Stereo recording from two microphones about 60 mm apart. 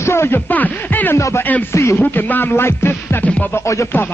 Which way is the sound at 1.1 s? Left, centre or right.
Left.